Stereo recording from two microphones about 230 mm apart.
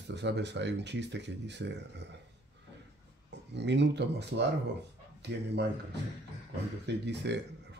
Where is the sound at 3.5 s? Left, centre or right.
Right.